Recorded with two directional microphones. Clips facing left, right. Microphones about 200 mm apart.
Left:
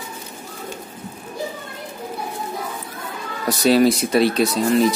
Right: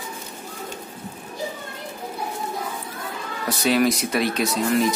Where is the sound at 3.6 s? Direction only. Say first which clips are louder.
Left 5 dB; 30° left (ahead or behind).